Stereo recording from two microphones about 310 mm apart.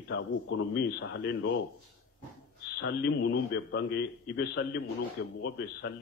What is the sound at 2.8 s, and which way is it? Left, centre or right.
Speech, left.